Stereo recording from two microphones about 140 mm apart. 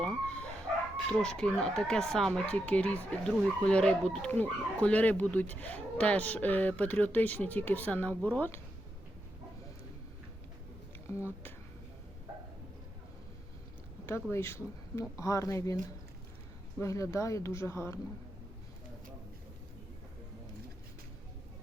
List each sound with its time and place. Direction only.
0.0 s dog: 5° left (ahead or behind)
1.2 s speech: 5° left (ahead or behind)
14.1 s speech: 20° left (ahead or behind)
16.8 s speech: 20° left (ahead or behind)